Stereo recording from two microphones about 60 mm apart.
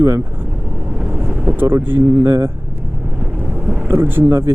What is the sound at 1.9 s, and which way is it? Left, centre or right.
Speech, right.